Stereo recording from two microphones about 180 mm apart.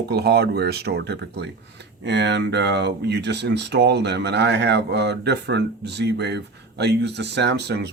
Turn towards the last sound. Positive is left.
turn(degrees=-65)  # may be behind; listen again after turning